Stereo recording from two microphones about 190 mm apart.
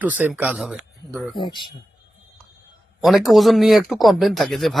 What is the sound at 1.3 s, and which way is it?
Speech, 25° left (ahead or behind).